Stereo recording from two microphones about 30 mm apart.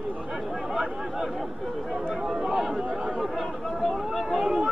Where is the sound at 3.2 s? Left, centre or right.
Centre.